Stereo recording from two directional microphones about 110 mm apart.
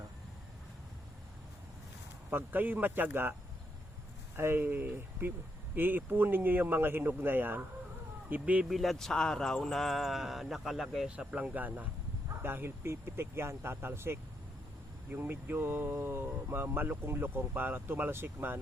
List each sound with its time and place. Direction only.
2.3 s speech: 15° right (ahead or behind)
4.4 s speech: 20° right (ahead or behind)
8.7 s speech: centre (ahead or behind); by 18.6 s 20° right (ahead or behind)